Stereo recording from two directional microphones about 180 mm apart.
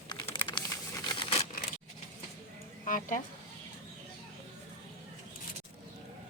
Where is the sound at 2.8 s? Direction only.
45° left (ahead or behind).